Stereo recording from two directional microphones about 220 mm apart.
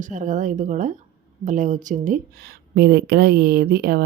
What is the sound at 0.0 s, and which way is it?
Speech, 35° right (ahead or behind).